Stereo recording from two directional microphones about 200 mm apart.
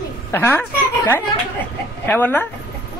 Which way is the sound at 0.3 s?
10° left (ahead or behind).